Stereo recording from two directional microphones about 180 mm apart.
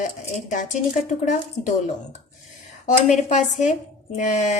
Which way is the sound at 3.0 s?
40° left (ahead or behind).